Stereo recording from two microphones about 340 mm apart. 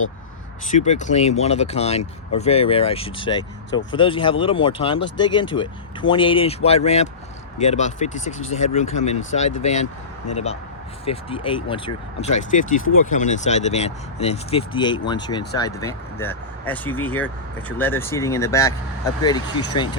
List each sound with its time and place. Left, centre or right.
0.7 s speech: left